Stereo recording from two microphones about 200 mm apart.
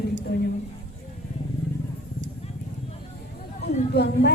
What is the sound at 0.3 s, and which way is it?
Speech, 55° left (ahead or behind).